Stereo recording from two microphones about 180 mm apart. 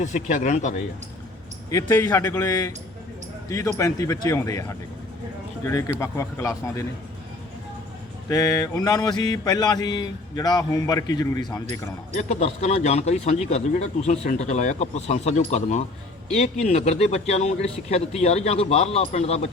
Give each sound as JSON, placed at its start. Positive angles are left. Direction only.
{"t": 0.0, "sound": "speech", "side_deg": 40}
{"t": 1.7, "sound": "a man's voice", "side_deg": 15}
{"t": 8.3, "sound": "mantra", "side_deg": 20}
{"t": 12.1, "sound": "a man's voice", "side_deg": 40}